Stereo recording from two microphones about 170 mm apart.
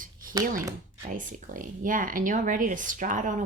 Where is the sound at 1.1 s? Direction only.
50° right (ahead or behind).